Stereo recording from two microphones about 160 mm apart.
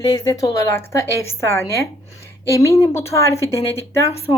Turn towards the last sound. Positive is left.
turn(degrees=15)  # may be behind; listen again after turning